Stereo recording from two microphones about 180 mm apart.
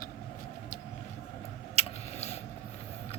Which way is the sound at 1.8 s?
35° left (ahead or behind).